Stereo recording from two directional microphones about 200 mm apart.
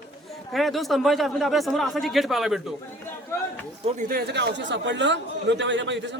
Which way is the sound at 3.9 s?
45° right (ahead or behind).